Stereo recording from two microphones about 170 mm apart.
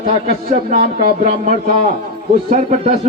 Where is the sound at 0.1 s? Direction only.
35° right (ahead or behind).